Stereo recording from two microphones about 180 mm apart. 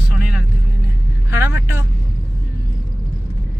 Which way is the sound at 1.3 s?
15° right (ahead or behind).